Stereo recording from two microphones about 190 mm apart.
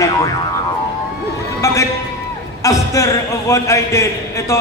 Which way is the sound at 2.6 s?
15° left (ahead or behind).